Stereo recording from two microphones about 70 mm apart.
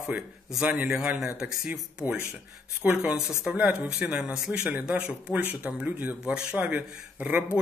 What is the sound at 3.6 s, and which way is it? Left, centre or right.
Speech, right.